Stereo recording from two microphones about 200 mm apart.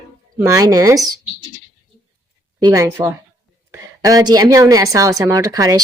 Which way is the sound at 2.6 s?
15° right (ahead or behind).